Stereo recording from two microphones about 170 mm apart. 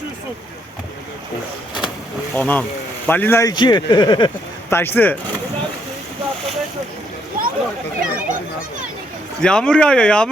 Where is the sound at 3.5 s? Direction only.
25° left (ahead or behind).